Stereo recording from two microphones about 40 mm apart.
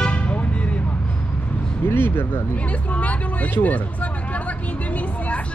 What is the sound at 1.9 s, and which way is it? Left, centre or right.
Speech, left.